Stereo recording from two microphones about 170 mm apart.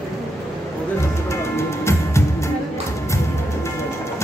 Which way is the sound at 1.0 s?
15° left (ahead or behind).